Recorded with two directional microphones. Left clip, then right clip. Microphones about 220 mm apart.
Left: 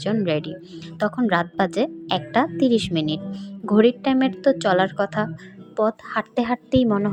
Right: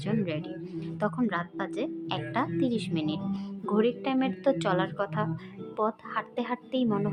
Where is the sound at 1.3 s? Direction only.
30° left (ahead or behind).